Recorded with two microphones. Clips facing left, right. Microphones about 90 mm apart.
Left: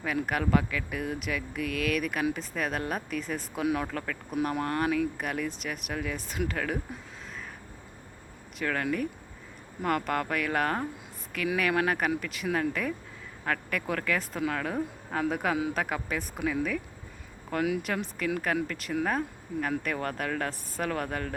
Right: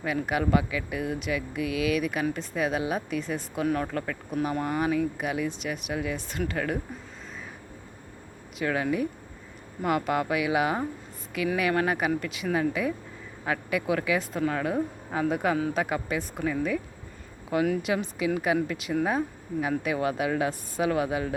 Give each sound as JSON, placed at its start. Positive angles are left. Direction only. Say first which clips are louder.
{"t": 0.0, "sound": "speech", "louder": "right 2 dB", "side_deg": 0}
{"t": 8.5, "sound": "speech", "louder": "right 3 dB", "side_deg": -5}
{"t": 15.5, "sound": "speech", "louder": "right 2 dB", "side_deg": 10}
{"t": 15.8, "sound": "speech", "louder": "right 3 dB", "side_deg": 0}